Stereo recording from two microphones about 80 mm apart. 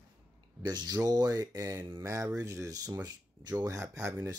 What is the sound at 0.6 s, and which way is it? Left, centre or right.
Speech, right.